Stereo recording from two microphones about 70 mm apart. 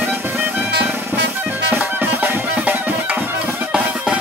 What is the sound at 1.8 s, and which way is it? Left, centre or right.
Music, right.